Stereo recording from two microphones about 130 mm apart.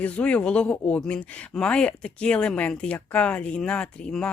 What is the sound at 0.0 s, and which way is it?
Speech, 10° left (ahead or behind).